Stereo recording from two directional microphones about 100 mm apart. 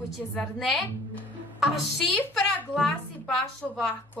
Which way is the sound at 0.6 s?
Centre (ahead or behind).